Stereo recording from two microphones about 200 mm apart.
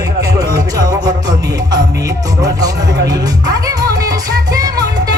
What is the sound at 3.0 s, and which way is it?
Music, 20° right (ahead or behind).